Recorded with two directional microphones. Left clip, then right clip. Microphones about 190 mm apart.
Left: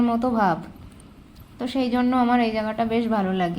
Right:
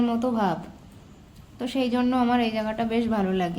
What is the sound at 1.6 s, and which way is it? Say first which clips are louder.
A woman's voice: left 2 dB; 5° left (ahead or behind).